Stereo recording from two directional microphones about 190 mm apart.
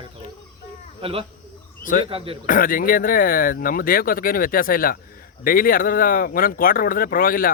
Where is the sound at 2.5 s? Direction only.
45° left (ahead or behind).